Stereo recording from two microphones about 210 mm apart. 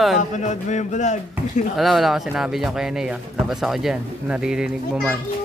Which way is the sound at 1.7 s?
Centre (ahead or behind).